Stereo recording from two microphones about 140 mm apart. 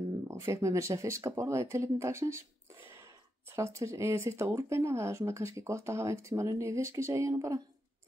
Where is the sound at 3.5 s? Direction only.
20° right (ahead or behind).